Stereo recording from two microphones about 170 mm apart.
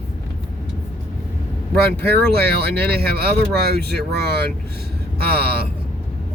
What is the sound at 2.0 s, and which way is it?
Speech, 65° right (ahead or behind).